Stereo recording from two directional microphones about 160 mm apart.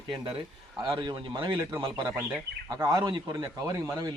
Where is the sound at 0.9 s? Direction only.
30° right (ahead or behind).